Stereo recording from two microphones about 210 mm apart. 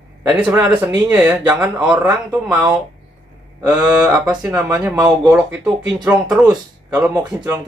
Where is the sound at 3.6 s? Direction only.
20° right (ahead or behind).